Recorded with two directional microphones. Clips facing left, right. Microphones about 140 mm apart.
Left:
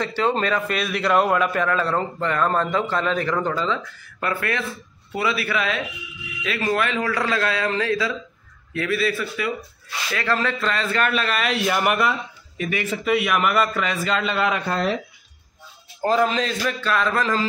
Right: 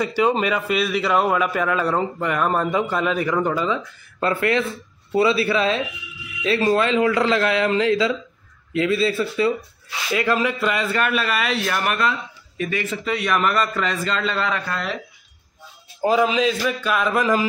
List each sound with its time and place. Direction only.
0.0 s a man's voice: 10° right (ahead or behind)
4.2 s a man's voice: 25° right (ahead or behind)
9.8 s a man's voice: 15° right (ahead or behind)
11.6 s a man's voice: 15° left (ahead or behind)
16.0 s a man's voice: 5° right (ahead or behind)